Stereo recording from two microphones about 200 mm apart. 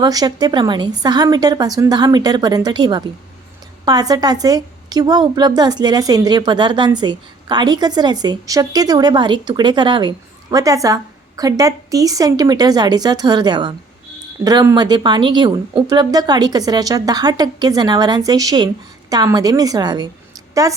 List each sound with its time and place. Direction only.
0.0 s a woman's voice: 20° right (ahead or behind)